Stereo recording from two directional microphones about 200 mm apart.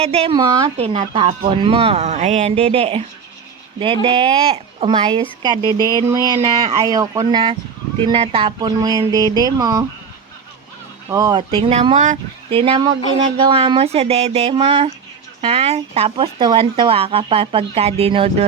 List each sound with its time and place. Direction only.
0.0 s speech: 30° right (ahead or behind)
5.7 s a sound: 15° left (ahead or behind)
6.0 s speech: 20° right (ahead or behind)
11.1 s speech: 20° right (ahead or behind)
13.3 s a sound: 30° right (ahead or behind)
15.4 s speech: 30° right (ahead or behind)